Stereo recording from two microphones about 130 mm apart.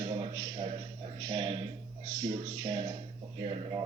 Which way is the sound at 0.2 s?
30° right (ahead or behind).